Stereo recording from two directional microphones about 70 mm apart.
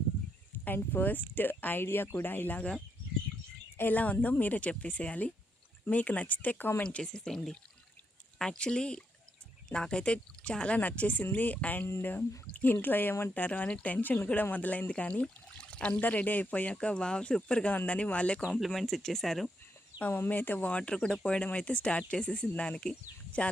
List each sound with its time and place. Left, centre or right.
0.6 s speech: left
3.8 s speech: left
6.8 s speech: centre; by 13.4 s left
13.4 s speech: left
18.6 s speech: centre
20.0 s speech: left